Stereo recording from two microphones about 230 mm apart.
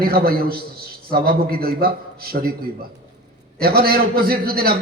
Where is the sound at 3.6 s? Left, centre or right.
Right.